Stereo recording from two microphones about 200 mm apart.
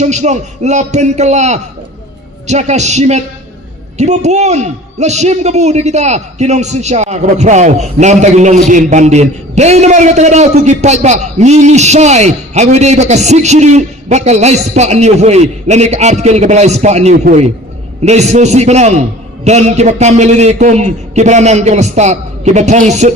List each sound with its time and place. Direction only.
0.0 s a man's voice: 35° right (ahead or behind)